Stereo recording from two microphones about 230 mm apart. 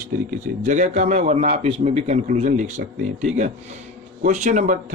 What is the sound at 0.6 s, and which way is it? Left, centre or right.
A man's voice, right.